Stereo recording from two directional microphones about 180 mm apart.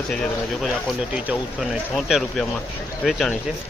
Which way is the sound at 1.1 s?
5° right (ahead or behind).